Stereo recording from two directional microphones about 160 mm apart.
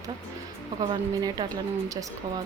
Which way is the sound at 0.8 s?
25° right (ahead or behind).